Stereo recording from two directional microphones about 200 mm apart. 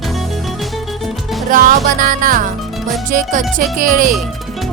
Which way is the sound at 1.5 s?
40° right (ahead or behind).